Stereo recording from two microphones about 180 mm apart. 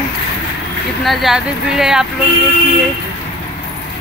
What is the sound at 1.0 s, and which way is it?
Speech, centre (ahead or behind).